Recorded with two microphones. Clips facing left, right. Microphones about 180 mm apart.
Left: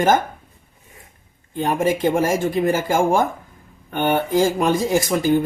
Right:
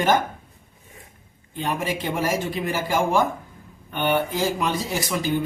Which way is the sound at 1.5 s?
45° left (ahead or behind).